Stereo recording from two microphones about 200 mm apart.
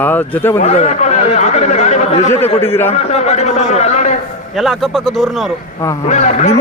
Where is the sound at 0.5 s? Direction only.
35° left (ahead or behind).